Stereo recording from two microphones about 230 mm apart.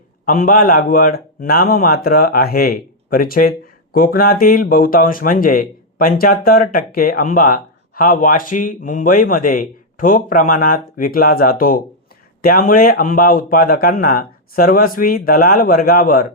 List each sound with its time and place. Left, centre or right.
0.3 s speech: left